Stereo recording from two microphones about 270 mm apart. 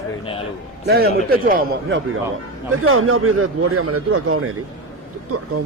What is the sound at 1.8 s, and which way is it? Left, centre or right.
A man's voice, right.